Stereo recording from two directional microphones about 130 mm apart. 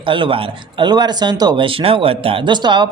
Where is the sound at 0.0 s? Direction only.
40° right (ahead or behind).